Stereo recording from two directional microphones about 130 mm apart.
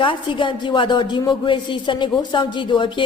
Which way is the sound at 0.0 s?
40° left (ahead or behind).